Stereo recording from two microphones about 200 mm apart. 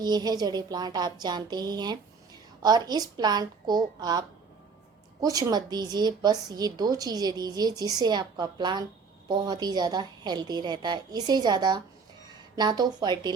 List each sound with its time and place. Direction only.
0.0 s a woman's voice: 20° right (ahead or behind)